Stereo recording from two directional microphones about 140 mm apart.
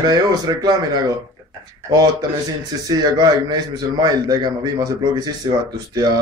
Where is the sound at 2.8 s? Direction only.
30° right (ahead or behind).